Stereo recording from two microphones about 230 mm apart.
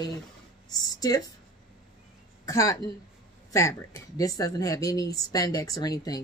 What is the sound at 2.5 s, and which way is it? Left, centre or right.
Speech, centre.